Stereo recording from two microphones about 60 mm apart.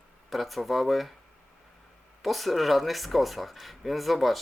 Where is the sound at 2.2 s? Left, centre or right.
Centre.